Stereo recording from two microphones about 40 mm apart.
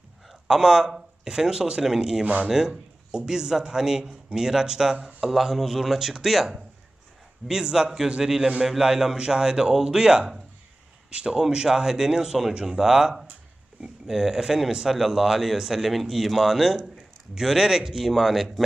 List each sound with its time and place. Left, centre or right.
0.4 s speech: centre